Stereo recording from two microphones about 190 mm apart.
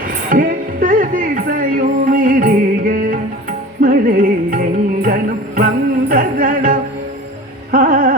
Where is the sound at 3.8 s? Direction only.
45° right (ahead or behind).